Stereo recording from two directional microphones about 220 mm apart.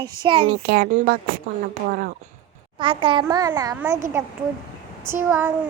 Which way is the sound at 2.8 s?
20° right (ahead or behind).